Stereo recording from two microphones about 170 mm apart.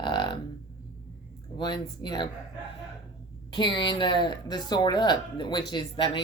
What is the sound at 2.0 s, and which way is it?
Speech, 25° left (ahead or behind).